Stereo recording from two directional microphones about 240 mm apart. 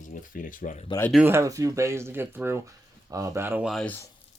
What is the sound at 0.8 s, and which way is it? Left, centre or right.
Speech, centre.